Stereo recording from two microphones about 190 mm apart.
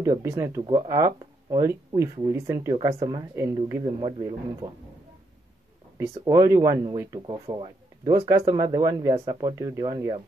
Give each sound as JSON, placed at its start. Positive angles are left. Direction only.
{"t": 0.0, "sound": "speech", "side_deg": -15}
{"t": 5.9, "sound": "speech", "side_deg": -15}